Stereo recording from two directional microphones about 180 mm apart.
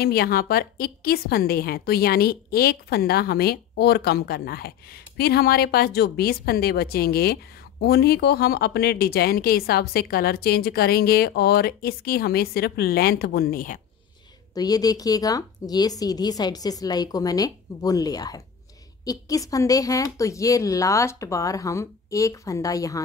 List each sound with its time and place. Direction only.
0.0 s a woman's voice: 55° left (ahead or behind)
14.5 s a woman's voice: 20° left (ahead or behind)